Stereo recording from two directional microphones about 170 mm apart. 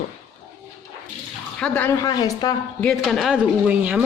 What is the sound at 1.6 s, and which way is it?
Speech, 10° left (ahead or behind).